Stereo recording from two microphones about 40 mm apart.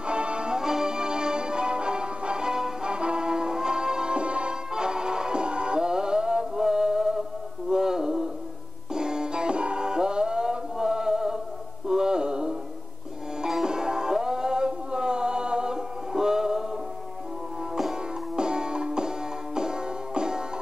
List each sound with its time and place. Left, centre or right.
0.0 s music: right
7.7 s a sound: centre
8.9 s music: centre
11.9 s a sound: centre
13.7 s music: centre
18.3 s music: centre